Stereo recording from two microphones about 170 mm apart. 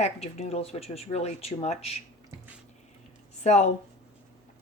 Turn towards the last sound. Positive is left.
turn(degrees=40)  # may be behind; listen again after turning